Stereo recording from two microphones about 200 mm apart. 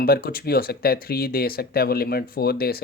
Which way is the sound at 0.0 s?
50° left (ahead or behind).